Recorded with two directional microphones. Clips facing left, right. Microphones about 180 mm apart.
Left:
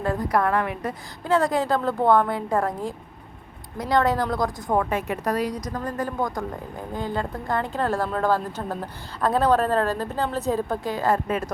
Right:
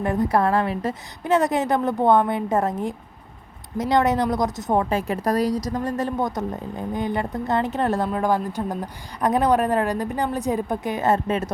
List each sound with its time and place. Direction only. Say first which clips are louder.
0.0 s a woman's voice: right 3 dB; 20° right (ahead or behind); by 5.5 s 35° right (ahead or behind)
5.7 s a woman's voice: right 3 dB; 20° right (ahead or behind)